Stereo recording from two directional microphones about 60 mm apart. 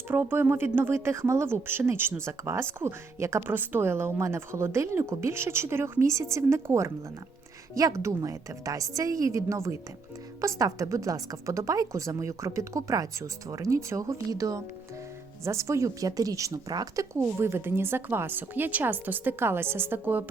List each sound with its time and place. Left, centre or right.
0.1 s a woman's voice: right
3.5 s speech: right
7.9 s a woman's voice: right
14.0 s a woman's voice: right
15.4 s a woman's voice: right
17.2 s a woman's voice: right